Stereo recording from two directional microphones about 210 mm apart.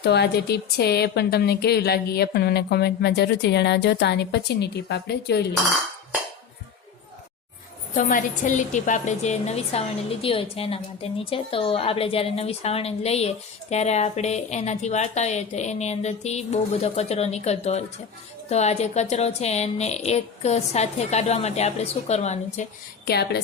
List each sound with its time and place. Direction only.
0.0 s speech: 50° left (ahead or behind)
7.9 s a woman's voice: 40° left (ahead or behind)
23.0 s speech: 50° left (ahead or behind)